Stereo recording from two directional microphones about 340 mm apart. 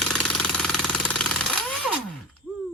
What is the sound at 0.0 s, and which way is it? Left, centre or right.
Jackhammer, centre.